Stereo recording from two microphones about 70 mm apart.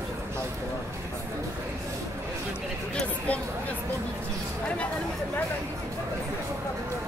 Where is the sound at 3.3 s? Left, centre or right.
Centre.